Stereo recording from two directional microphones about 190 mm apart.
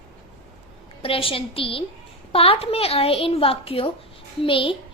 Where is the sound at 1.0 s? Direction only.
30° left (ahead or behind).